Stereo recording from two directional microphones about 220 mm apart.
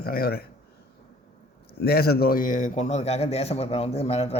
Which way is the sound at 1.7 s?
45° left (ahead or behind).